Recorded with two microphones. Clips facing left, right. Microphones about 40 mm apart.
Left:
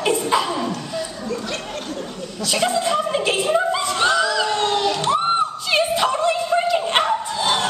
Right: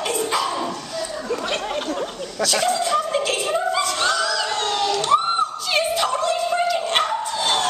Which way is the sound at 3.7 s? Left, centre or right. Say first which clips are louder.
Left 2 dB; centre.